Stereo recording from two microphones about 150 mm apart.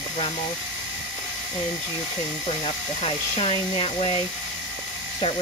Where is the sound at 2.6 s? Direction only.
40° left (ahead or behind).